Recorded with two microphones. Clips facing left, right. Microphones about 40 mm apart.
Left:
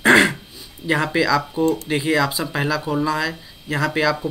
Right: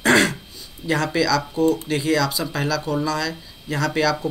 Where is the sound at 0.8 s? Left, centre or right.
Centre.